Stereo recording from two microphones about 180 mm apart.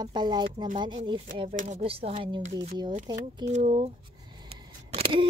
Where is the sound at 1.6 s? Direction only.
40° right (ahead or behind).